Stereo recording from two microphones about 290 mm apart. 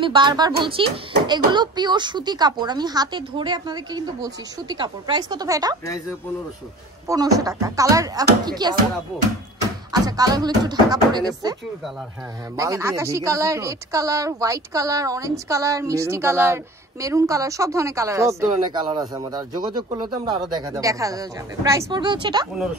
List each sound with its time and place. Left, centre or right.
0.0 s speech: centre
7.1 s speech: centre
9.9 s speech: centre
12.5 s speech: centre